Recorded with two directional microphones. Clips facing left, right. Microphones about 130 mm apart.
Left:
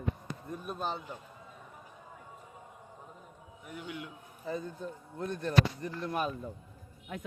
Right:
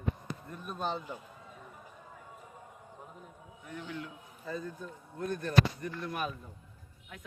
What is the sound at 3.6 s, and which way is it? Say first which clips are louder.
A man's voice: right 1 dB; 10° left (ahead or behind).